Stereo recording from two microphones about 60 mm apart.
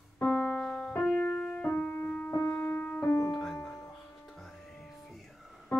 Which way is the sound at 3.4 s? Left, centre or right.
Centre.